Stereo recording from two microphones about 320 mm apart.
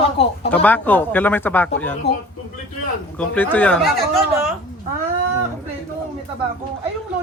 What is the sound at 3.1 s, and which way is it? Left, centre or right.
Speech, centre.